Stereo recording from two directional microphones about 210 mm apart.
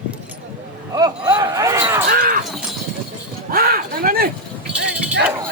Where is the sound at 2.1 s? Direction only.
40° right (ahead or behind).